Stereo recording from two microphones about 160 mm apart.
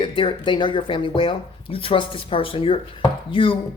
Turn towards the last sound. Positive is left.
turn(degrees=30)  # may be behind; listen again after turning